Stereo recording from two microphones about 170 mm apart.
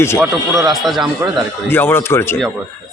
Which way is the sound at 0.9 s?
Centre (ahead or behind).